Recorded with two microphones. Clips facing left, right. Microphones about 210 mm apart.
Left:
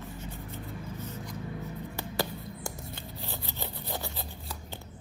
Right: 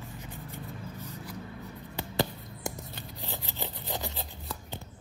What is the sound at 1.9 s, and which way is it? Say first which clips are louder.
Finger snapping: right 4 dB; 20° right (ahead or behind).